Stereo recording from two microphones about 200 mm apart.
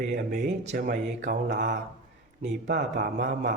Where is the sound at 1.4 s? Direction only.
60° right (ahead or behind).